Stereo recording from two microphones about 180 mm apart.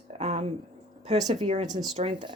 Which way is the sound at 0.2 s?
40° right (ahead or behind).